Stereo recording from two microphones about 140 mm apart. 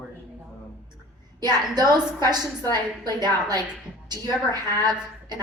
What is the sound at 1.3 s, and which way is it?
A woman's voice, 30° right (ahead or behind).